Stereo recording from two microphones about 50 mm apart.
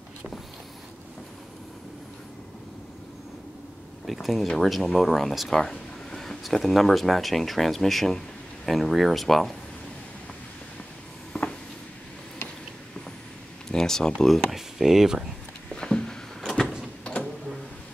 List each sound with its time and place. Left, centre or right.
4.0 s speech: centre
11.3 s a sound: centre
13.7 s speech: centre
14.3 s speech: centre
15.7 s a sound: centre
17.0 s mechanisms: left